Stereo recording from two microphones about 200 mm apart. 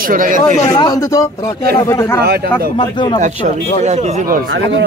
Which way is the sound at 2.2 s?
50° right (ahead or behind).